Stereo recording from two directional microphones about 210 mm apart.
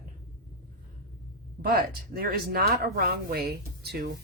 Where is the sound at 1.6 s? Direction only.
45° right (ahead or behind).